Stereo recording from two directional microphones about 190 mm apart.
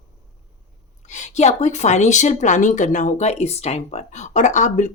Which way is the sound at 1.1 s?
35° left (ahead or behind).